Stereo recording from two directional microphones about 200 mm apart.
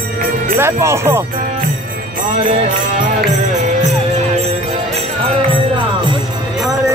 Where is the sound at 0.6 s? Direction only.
15° right (ahead or behind).